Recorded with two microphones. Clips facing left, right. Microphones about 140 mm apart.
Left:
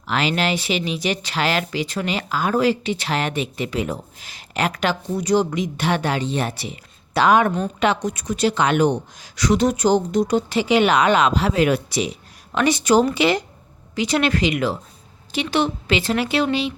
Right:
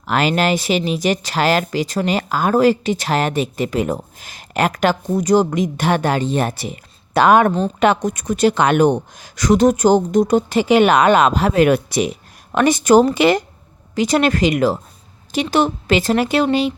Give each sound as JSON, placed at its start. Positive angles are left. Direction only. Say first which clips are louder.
{"t": 0.1, "sound": "speech", "louder": "right 4 dB", "side_deg": -45}